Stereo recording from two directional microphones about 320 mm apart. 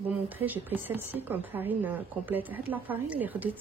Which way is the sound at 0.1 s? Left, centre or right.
Centre.